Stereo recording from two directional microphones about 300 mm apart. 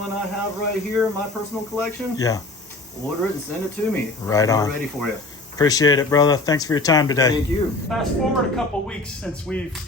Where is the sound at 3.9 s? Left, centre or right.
Centre.